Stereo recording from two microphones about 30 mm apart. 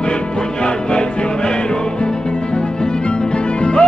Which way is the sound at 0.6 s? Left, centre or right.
Left.